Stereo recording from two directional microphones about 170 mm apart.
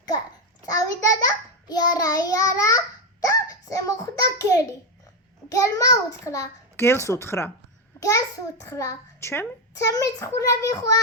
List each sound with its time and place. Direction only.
0.6 s child singing: 20° left (ahead or behind)
5.5 s a child's voice: 20° left (ahead or behind)